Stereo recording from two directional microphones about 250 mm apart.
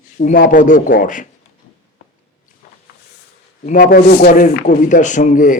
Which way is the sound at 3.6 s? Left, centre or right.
Left.